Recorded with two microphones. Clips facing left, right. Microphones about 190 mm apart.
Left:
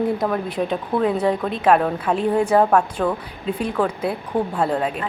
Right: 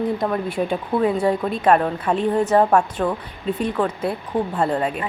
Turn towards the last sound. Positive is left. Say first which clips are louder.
# even
turn(degrees=5)  # may be behind; listen again after turning